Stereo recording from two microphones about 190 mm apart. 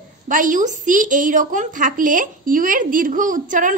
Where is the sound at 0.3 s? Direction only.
45° right (ahead or behind).